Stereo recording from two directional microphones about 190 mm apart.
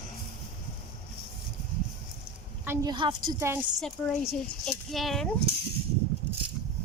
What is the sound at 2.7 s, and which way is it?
Speech, 25° right (ahead or behind).